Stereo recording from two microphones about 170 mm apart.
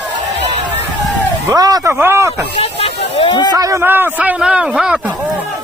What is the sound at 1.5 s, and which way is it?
Speech, 20° right (ahead or behind).